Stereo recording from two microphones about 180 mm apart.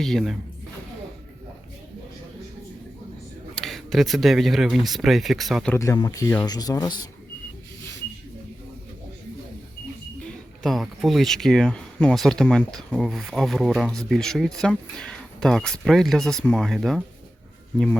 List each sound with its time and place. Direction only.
0.0 s speech: centre (ahead or behind)
3.5 s speech: centre (ahead or behind)
5.7 s speech: 15° left (ahead or behind)
10.2 s speech: centre (ahead or behind)